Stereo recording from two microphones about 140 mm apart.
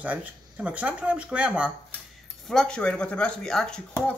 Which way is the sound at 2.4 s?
5° left (ahead or behind).